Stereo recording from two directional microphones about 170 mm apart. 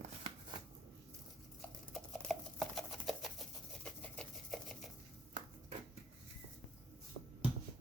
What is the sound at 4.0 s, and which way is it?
Sewing machine, 5° left (ahead or behind).